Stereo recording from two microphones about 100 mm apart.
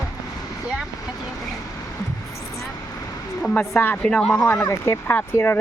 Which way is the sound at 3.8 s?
15° left (ahead or behind).